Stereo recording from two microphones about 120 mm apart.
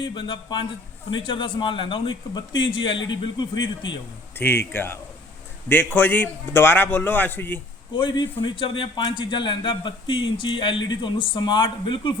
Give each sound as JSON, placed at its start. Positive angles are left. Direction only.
{"t": 0.0, "sound": "a man's voice", "side_deg": 45}
{"t": 4.4, "sound": "a man's voice", "side_deg": 20}
{"t": 7.9, "sound": "a man's voice", "side_deg": 45}